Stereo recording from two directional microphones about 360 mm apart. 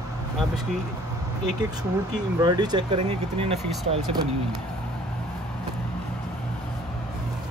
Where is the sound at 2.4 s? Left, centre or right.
Centre.